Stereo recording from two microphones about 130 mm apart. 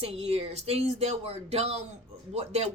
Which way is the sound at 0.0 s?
55° right (ahead or behind).